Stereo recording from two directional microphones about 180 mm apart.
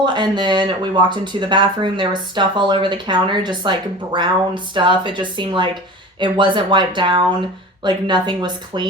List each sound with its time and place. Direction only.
0.0 s speech: 25° right (ahead or behind)